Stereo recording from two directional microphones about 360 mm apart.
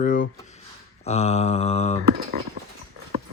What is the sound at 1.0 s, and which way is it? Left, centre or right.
Mantra, centre.